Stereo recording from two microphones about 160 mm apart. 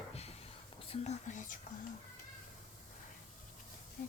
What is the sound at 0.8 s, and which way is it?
Speech, 40° left (ahead or behind).